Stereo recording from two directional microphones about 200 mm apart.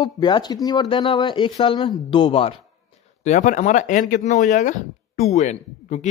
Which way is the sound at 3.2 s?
40° left (ahead or behind).